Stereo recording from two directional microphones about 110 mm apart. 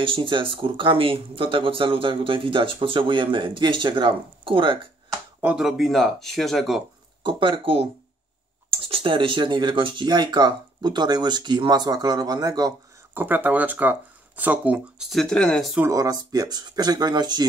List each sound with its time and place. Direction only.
0.0 s speech: 50° right (ahead or behind)
5.6 s speech: centre (ahead or behind)
7.2 s speech: 50° right (ahead or behind)
13.1 s speech: 20° right (ahead or behind)
15.0 s speech: 5° left (ahead or behind)
15.9 s speech: 30° right (ahead or behind)